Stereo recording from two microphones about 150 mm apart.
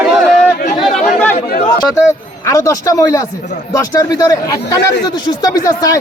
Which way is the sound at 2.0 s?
20° left (ahead or behind).